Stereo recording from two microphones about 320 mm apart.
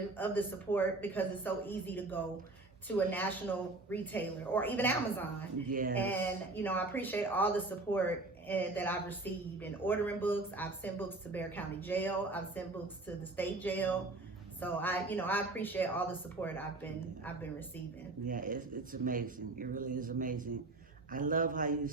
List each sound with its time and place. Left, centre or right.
0.2 s speech: centre
5.6 s speech: right
5.9 s speech: centre
18.3 s speech: right